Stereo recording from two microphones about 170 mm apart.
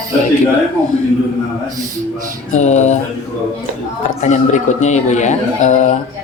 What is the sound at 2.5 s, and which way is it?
Speech, 45° left (ahead or behind).